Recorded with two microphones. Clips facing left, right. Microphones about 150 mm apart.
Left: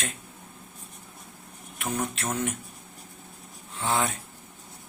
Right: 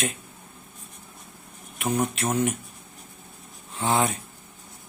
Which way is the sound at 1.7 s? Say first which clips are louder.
Right 5 dB; 15° right (ahead or behind).